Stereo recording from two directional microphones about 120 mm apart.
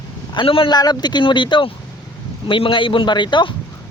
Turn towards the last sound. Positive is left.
turn(degrees=40)  # may be behind; listen again after turning